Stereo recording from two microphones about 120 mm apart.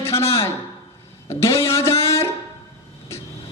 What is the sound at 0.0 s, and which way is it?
Speech, 20° left (ahead or behind).